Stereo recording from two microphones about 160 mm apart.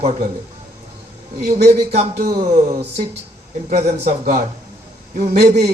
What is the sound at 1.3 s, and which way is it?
Music, 75° right (ahead or behind).